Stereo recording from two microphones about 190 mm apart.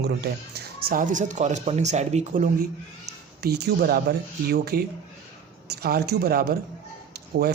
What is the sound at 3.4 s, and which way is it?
Speech, 55° right (ahead or behind).